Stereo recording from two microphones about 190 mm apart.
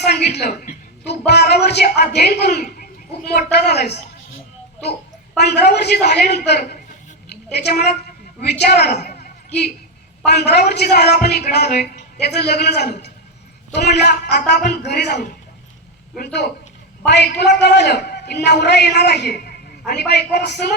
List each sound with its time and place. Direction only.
0.0 s a woman's voice: 60° left (ahead or behind)
5.4 s a man's voice: 60° left (ahead or behind)
9.0 s a sound: 55° left (ahead or behind)
10.2 s a man's voice: 60° left (ahead or behind)